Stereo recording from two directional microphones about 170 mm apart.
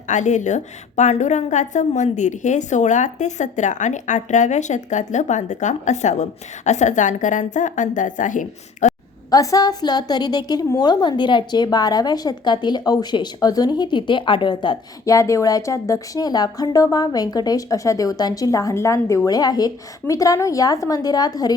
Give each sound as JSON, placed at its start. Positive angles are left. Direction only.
{"t": 0.1, "sound": "a woman's voice", "side_deg": 45}
{"t": 9.3, "sound": "a woman's voice", "side_deg": 20}